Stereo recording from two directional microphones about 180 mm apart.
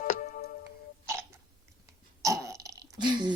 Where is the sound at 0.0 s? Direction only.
45° left (ahead or behind).